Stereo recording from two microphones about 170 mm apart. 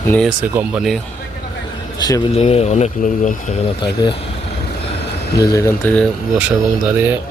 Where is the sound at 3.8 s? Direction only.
30° left (ahead or behind).